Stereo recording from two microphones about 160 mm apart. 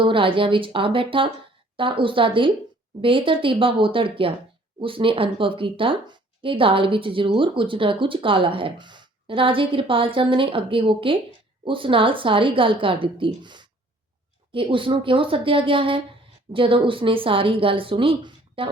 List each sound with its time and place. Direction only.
0.0 s speech: 35° right (ahead or behind)